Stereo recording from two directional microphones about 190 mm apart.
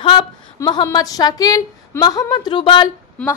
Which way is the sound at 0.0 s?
30° left (ahead or behind).